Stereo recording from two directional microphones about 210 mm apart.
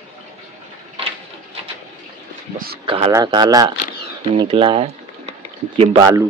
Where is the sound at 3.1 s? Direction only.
15° right (ahead or behind).